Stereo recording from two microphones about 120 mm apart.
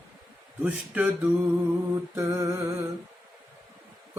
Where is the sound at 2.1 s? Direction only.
25° right (ahead or behind).